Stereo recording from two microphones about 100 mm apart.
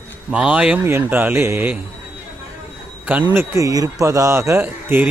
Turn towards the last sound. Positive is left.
turn(degrees=-20)  # may be behind; listen again after turning